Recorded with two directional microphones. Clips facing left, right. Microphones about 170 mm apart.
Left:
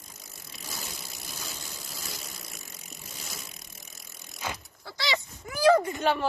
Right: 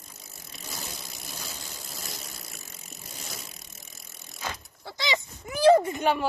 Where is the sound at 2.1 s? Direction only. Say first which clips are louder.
Even; 5° right (ahead or behind).